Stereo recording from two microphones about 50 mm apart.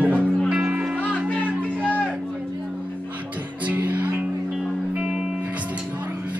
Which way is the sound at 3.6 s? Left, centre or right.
Right.